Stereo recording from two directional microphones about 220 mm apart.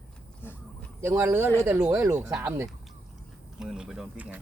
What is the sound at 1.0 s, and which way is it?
Speech, 10° right (ahead or behind).